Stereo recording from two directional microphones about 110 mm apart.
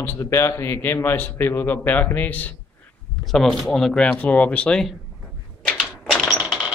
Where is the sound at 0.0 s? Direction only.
25° left (ahead or behind).